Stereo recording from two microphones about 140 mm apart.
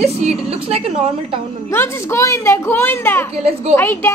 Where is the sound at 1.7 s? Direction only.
20° left (ahead or behind).